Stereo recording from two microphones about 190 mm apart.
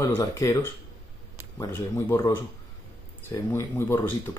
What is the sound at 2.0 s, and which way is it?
Speech, 15° left (ahead or behind).